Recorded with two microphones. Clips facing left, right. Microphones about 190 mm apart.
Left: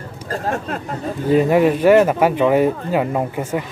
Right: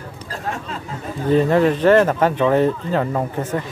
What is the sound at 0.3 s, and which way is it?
Speech, 55° left (ahead or behind).